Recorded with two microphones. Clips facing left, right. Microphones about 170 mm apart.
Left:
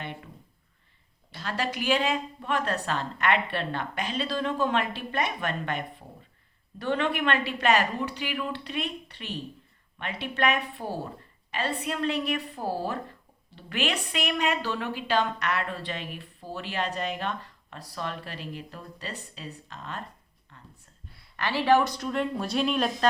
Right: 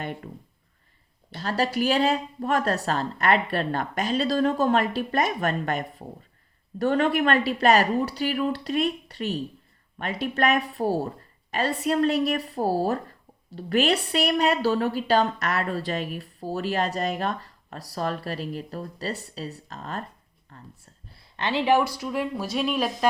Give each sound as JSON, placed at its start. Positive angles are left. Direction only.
{"t": 0.0, "sound": "speech", "side_deg": -45}
{"t": 1.3, "sound": "a woman's voice", "side_deg": -40}
{"t": 20.5, "sound": "a sound", "side_deg": -40}
{"t": 21.1, "sound": "speech", "side_deg": -25}